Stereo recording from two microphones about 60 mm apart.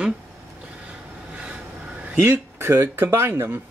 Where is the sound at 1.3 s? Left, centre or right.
Right.